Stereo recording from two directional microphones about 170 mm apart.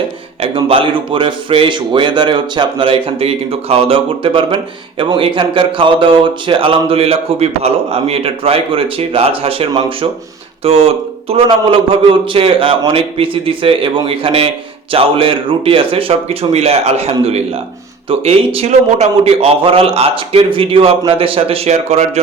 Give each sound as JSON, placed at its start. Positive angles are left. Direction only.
{"t": 0.5, "sound": "speech", "side_deg": -30}